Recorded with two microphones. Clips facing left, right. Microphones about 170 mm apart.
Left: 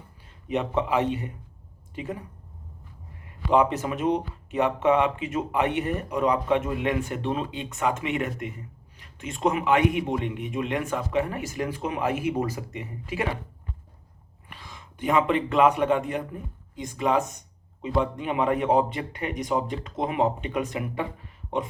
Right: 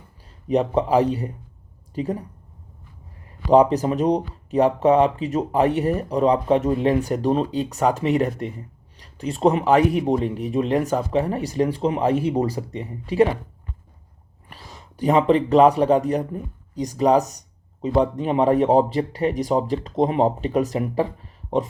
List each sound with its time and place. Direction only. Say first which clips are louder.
0.4 s speech: right 6 dB; 35° right (ahead or behind)
3.2 s speech: right 6 dB; 35° right (ahead or behind)
14.5 s speech: right 2 dB; 40° right (ahead or behind)